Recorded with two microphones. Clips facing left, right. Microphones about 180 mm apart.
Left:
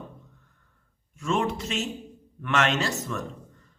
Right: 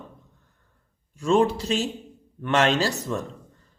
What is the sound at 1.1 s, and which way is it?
Speech, 35° right (ahead or behind).